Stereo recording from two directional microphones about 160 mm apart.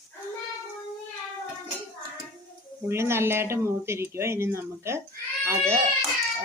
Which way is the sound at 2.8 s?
15° right (ahead or behind).